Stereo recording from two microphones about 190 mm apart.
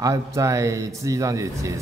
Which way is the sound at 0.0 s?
15° right (ahead or behind).